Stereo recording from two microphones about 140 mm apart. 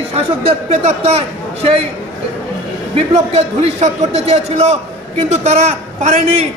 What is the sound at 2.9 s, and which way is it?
A man's voice, 55° right (ahead or behind).